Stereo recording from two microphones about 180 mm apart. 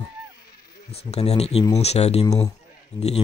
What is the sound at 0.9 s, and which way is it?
Speech, 35° left (ahead or behind).